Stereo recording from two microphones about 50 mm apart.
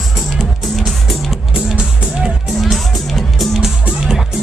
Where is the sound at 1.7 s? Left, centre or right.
Centre.